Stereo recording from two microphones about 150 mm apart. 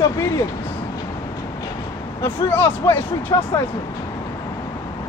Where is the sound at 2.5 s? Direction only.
15° left (ahead or behind).